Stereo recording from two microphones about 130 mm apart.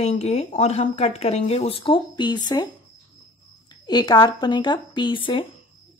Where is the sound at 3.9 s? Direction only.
35° left (ahead or behind).